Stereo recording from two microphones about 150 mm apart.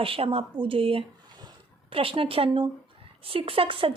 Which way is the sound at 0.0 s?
35° right (ahead or behind).